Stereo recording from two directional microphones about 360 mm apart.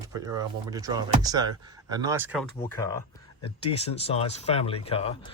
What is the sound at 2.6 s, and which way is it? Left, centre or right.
Speech, centre.